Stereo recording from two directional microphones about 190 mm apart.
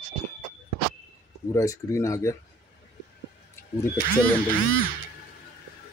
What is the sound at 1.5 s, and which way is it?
Speech, 15° left (ahead or behind).